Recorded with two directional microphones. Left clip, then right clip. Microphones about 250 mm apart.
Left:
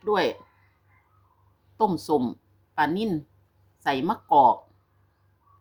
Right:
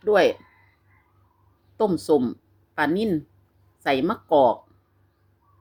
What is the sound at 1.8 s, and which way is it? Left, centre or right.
A woman's voice, centre.